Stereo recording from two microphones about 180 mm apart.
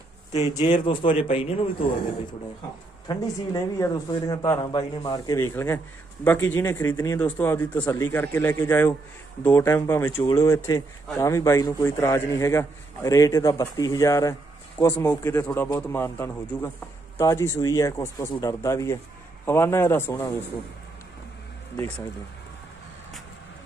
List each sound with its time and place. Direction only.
0.3 s a man's voice: 35° left (ahead or behind)
3.1 s a man's voice: 20° left (ahead or behind)